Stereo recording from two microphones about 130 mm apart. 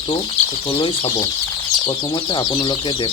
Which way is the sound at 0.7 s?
40° left (ahead or behind).